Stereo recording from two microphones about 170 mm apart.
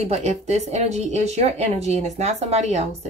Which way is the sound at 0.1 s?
40° right (ahead or behind).